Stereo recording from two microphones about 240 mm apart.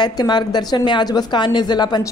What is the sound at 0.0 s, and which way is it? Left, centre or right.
A woman's voice, centre.